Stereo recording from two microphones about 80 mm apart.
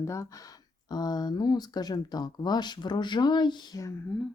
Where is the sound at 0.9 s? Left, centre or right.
Left.